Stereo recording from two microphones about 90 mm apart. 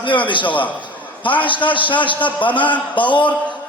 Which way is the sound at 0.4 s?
20° left (ahead or behind).